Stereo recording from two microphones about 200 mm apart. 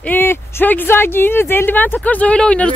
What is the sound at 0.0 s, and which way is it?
Speech, 10° left (ahead or behind).